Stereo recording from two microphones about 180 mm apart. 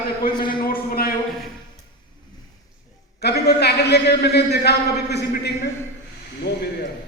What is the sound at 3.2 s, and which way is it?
A man's voice, 65° left (ahead or behind).